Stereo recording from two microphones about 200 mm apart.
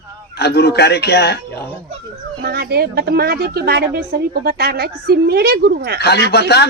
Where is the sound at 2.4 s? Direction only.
50° right (ahead or behind).